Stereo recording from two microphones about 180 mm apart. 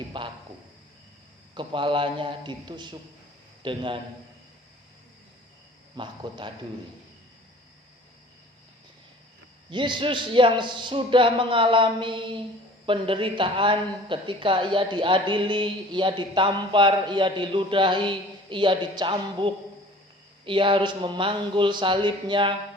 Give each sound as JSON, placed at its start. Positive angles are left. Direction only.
{"t": 0.1, "sound": "speech", "side_deg": -25}
{"t": 1.5, "sound": "a woman's voice", "side_deg": -25}
{"t": 6.0, "sound": "a woman's voice", "side_deg": -25}
{"t": 9.6, "sound": "a woman's voice", "side_deg": -25}